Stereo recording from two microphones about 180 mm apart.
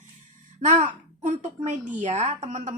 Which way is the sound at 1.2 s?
40° right (ahead or behind).